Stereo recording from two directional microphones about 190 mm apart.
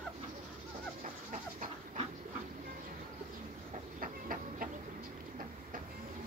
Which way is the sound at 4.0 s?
50° right (ahead or behind).